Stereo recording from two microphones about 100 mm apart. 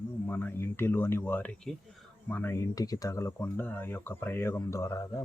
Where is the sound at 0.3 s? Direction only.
20° left (ahead or behind).